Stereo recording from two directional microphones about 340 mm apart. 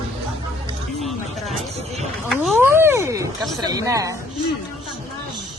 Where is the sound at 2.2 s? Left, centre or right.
Centre.